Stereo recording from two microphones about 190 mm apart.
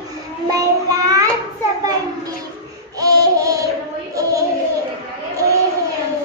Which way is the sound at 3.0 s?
20° right (ahead or behind).